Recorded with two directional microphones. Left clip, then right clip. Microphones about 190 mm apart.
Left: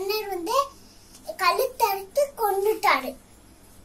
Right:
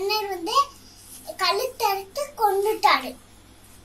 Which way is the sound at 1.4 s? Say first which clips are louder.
Left 1 dB; 45° left (ahead or behind).